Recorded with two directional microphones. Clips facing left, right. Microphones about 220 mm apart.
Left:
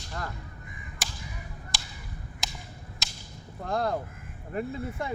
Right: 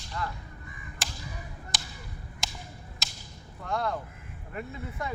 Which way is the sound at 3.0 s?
Centre (ahead or behind).